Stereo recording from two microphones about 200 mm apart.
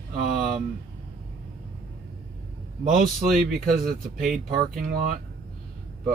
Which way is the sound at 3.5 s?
50° right (ahead or behind).